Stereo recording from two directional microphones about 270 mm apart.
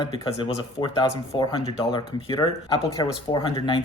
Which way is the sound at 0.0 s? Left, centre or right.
Centre.